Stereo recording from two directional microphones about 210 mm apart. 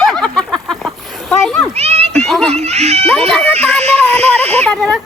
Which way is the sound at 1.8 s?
30° right (ahead or behind).